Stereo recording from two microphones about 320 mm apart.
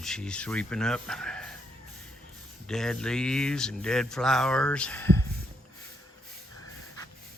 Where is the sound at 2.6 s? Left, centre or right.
Centre.